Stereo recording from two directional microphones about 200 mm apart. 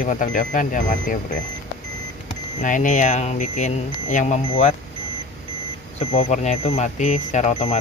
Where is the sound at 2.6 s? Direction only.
40° left (ahead or behind).